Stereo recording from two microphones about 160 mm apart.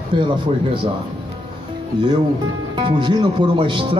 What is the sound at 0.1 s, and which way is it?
Speech, 30° right (ahead or behind).